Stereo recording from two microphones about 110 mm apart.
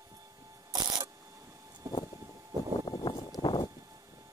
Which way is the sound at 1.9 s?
30° right (ahead or behind).